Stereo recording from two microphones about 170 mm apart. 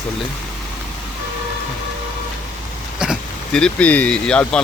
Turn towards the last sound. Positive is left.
turn(degrees=5)  # may be behind; listen again after turning